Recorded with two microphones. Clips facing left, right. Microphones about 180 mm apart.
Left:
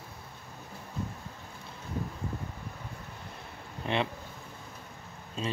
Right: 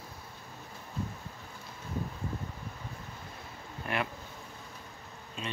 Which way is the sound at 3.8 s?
25° left (ahead or behind).